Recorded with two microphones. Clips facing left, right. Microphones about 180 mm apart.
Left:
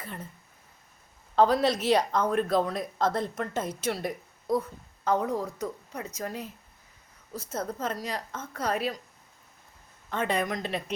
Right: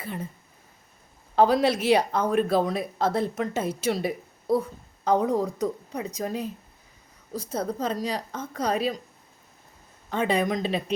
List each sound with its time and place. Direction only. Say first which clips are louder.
0.0 s speech: right 6 dB; 10° right (ahead or behind)
1.4 s a woman's voice: right 2 dB; 10° right (ahead or behind)
7.9 s a woman's voice: right 5 dB; 35° right (ahead or behind)
8.5 s a woman's voice: right 3 dB; 15° right (ahead or behind)
10.1 s a woman's voice: right 4 dB; 15° right (ahead or behind)